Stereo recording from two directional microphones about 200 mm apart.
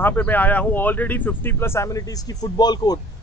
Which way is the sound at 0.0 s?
10° left (ahead or behind).